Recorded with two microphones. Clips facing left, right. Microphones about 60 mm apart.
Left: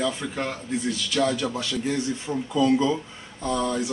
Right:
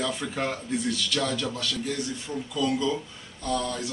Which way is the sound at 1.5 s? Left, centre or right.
Left.